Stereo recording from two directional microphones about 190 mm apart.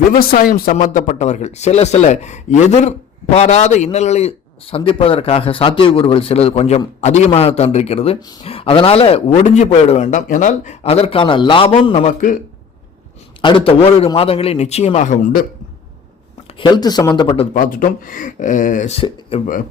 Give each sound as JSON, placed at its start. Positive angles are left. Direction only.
{"t": 0.1, "sound": "a man's voice", "side_deg": 50}
{"t": 13.4, "sound": "a man's voice", "side_deg": 25}
{"t": 16.6, "sound": "speech", "side_deg": 25}
{"t": 17.5, "sound": "speech", "side_deg": 45}